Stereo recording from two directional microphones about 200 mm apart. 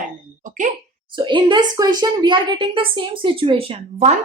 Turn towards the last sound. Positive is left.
turn(degrees=-30)  # may be behind; listen again after turning